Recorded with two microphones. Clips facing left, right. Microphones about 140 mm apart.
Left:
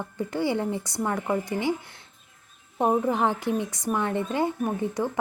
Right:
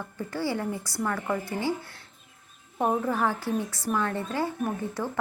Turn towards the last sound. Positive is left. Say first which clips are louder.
# left 3 dB
turn(degrees=20)  # may be behind; listen again after turning